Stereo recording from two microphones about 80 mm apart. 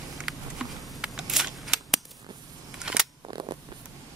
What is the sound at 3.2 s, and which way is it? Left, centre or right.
Scissors, right.